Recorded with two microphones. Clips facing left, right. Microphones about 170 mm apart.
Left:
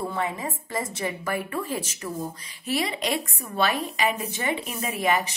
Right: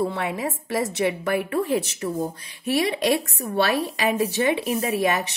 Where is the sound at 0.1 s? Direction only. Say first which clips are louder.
Right 2 dB; 75° right (ahead or behind).